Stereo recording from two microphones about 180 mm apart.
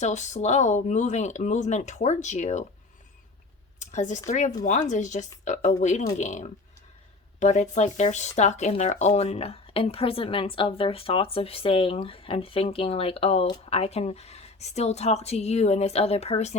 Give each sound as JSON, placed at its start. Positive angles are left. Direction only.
{"t": 0.0, "sound": "speech", "side_deg": 40}
{"t": 3.8, "sound": "a sound", "side_deg": 40}
{"t": 4.3, "sound": "speech", "side_deg": 40}